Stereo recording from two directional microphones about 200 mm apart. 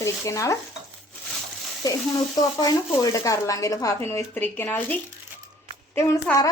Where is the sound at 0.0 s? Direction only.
15° left (ahead or behind).